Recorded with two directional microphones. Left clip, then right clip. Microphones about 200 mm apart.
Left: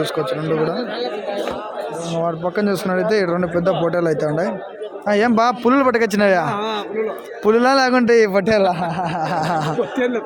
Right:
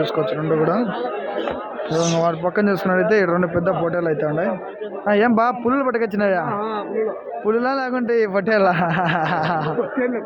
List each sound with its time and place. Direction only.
2.2 s a man's voice: 10° left (ahead or behind)
8.6 s speech: centre (ahead or behind)